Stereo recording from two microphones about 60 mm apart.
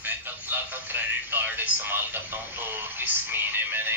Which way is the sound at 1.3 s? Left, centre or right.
Right.